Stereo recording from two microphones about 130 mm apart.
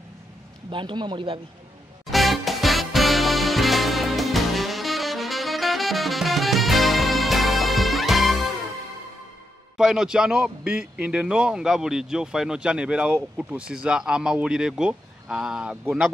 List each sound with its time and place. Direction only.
0.7 s a man's voice: 40° right (ahead or behind)
2.0 s music: centre (ahead or behind)
9.8 s a man's voice: 5° right (ahead or behind)